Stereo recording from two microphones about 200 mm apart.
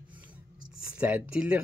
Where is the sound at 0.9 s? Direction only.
10° right (ahead or behind).